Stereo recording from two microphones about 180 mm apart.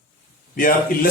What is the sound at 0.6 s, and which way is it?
Speech, 50° left (ahead or behind).